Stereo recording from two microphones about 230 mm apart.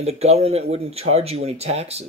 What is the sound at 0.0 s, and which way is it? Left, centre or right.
Speech, right.